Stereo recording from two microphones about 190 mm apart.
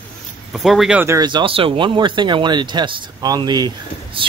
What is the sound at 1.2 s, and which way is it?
A man's voice, 25° right (ahead or behind).